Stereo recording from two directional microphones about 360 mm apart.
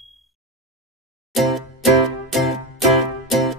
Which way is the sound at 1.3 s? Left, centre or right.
Centre.